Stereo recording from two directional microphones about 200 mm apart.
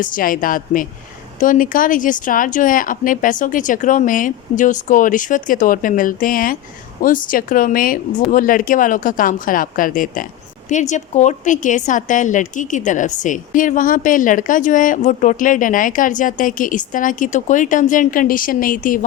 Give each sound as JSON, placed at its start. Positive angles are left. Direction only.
{"t": 0.0, "sound": "a woman's voice", "side_deg": 45}